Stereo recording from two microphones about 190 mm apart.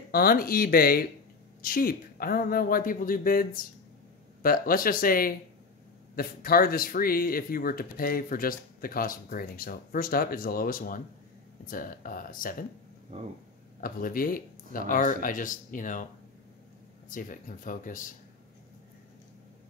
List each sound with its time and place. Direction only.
0.1 s speech: 50° left (ahead or behind)
13.7 s speech: 50° left (ahead or behind)
17.1 s speech: 45° left (ahead or behind)